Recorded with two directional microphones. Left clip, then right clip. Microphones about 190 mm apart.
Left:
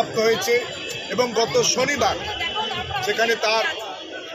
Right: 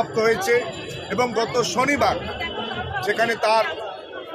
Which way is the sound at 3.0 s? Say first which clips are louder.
Right 1 dB; 15° right (ahead or behind).